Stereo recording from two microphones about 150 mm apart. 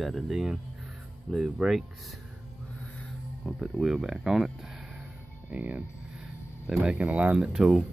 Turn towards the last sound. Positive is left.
turn(degrees=-5)  # may be behind; listen again after turning